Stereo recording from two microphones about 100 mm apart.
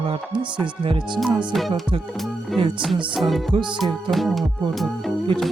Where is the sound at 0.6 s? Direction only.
55° right (ahead or behind).